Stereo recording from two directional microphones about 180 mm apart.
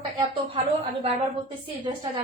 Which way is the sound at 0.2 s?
30° right (ahead or behind).